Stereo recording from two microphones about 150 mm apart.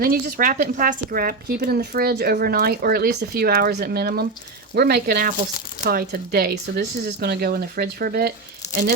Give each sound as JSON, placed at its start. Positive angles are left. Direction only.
{"t": 0.0, "sound": "a woman's voice", "side_deg": -75}